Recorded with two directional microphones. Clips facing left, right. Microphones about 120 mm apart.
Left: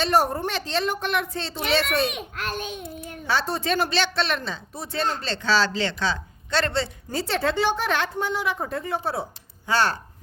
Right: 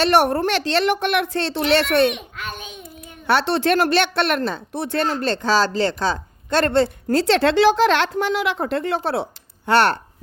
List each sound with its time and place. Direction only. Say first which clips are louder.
0.0 s a woman's voice: right 5 dB; 80° right
2.6 s child singing: left 5 dB; 40° left (ahead or behind)
3.2 s speech: right 7 dB; 70° right (ahead or behind)
9.6 s speech: right 6 dB; 65° right (ahead or behind)